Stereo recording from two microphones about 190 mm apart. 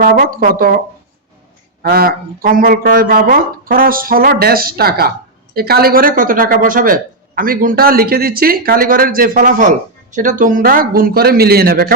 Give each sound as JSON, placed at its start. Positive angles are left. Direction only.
{"t": 0.0, "sound": "speech", "side_deg": -45}
{"t": 1.8, "sound": "speech", "side_deg": -55}